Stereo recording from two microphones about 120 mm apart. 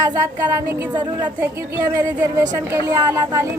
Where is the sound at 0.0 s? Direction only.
30° right (ahead or behind).